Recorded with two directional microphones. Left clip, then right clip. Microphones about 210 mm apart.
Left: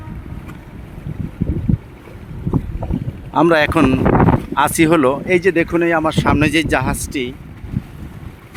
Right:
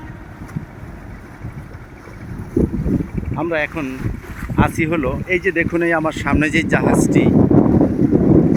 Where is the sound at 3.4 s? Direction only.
35° left (ahead or behind); by 7.3 s 10° left (ahead or behind).